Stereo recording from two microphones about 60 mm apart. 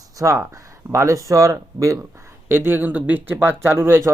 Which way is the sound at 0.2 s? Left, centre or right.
Right.